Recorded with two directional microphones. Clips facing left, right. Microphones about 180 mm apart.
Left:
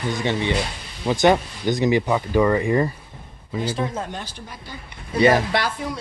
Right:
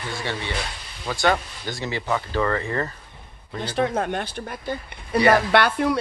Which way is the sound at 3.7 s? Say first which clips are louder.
Right 4 dB; 65° right (ahead or behind).